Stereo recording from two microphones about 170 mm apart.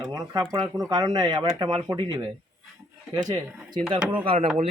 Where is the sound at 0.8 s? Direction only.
25° right (ahead or behind).